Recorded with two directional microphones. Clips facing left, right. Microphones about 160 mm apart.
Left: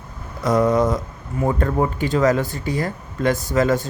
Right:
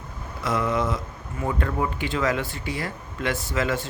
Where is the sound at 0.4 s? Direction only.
40° left (ahead or behind).